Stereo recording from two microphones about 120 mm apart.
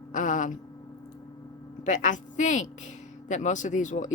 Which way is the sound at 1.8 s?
90° left.